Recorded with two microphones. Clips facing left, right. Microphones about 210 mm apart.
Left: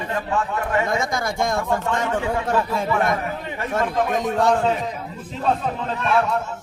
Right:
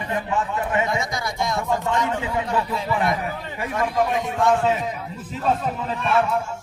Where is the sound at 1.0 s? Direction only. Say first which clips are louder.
Left 3 dB; 50° left (ahead or behind).